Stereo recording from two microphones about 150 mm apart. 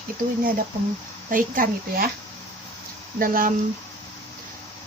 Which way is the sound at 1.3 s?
65° right (ahead or behind).